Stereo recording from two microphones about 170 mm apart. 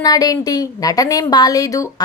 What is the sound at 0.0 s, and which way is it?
A woman's voice, 20° left (ahead or behind).